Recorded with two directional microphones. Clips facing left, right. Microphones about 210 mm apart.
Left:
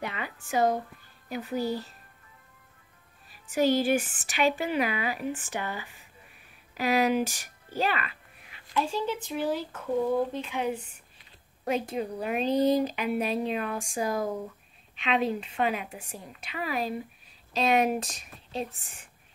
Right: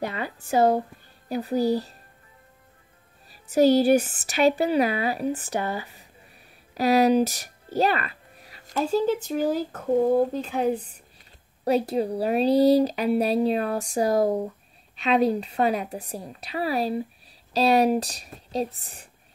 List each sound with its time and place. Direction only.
0.0 s speech: 35° right (ahead or behind)
3.3 s speech: 40° right (ahead or behind)